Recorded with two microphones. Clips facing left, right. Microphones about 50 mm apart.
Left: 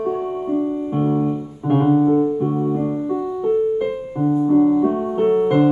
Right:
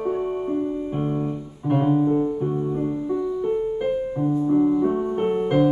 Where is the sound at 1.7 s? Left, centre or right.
Left.